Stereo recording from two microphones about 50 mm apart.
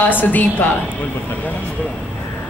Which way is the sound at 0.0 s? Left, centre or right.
Left.